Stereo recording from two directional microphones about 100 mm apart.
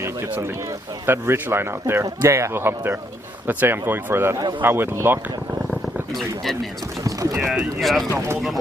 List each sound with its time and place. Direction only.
1.0 s speech: 25° right (ahead or behind)
6.1 s speech: centre (ahead or behind)
7.0 s clip-clop: 35° right (ahead or behind)
7.3 s speech: 5° right (ahead or behind)
8.1 s speech: 25° right (ahead or behind)